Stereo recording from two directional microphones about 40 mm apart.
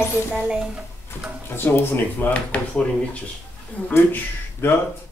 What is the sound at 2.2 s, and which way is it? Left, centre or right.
Speech, left.